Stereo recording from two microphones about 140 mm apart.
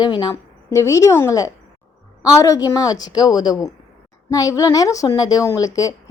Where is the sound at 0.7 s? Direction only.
20° left (ahead or behind).